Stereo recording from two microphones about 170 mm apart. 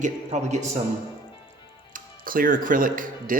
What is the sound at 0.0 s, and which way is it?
Speech, 40° right (ahead or behind).